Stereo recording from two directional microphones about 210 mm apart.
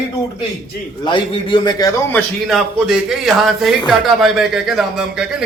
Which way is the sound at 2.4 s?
Centre (ahead or behind).